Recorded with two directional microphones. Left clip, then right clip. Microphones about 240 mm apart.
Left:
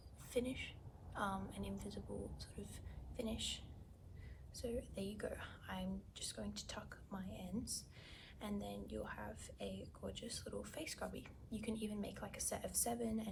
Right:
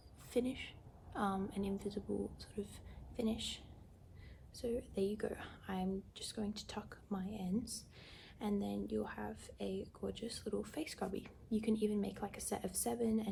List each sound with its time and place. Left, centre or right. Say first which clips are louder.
0.3 s a woman's voice: right 3 dB; right